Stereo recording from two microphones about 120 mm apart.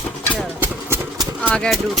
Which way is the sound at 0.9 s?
20° right (ahead or behind).